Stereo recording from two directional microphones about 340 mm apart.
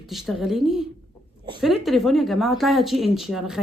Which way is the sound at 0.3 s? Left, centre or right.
Centre.